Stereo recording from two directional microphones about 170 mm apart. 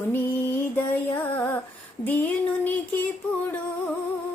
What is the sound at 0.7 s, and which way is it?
Female singing, 10° left (ahead or behind).